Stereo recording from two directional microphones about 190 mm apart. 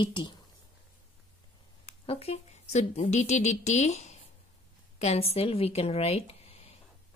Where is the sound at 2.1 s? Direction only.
35° left (ahead or behind).